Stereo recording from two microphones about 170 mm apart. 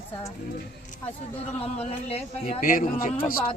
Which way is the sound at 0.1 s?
20° left (ahead or behind).